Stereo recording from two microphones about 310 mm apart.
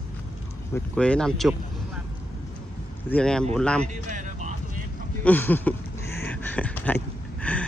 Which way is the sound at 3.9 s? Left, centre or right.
Right.